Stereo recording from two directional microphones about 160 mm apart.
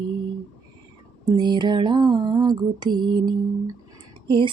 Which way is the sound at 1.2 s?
25° right (ahead or behind).